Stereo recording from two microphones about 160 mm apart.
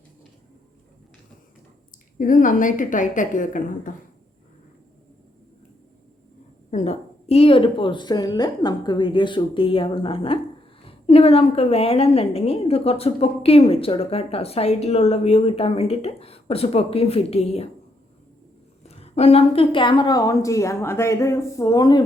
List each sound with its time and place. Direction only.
2.1 s a woman's voice: 55° left (ahead or behind)
6.7 s a woman's voice: 45° left (ahead or behind)
18.8 s a woman's voice: 40° left (ahead or behind)